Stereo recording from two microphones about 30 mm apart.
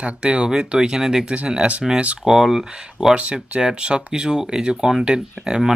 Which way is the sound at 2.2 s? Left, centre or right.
Centre.